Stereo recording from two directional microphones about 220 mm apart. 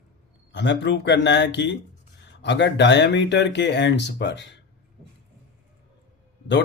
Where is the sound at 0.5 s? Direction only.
55° left (ahead or behind).